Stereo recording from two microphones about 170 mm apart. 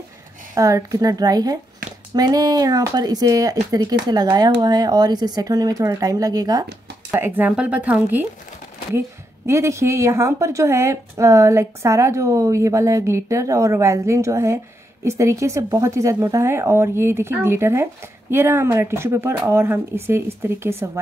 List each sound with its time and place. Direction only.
0.6 s speech: 20° right (ahead or behind)
7.1 s a woman's voice: 10° right (ahead or behind)
9.5 s a woman's voice: 15° right (ahead or behind)